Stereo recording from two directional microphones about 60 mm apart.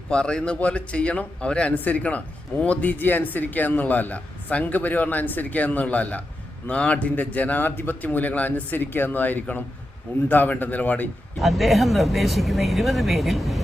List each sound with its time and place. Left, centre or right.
0.1 s a man's voice: centre
11.3 s speech: centre